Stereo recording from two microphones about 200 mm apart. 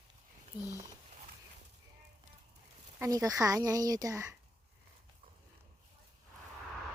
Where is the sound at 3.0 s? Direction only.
15° right (ahead or behind).